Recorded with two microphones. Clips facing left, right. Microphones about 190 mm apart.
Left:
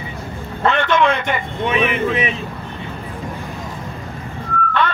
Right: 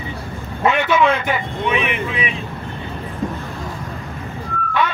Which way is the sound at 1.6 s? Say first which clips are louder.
Left 4 dB; 40° left (ahead or behind).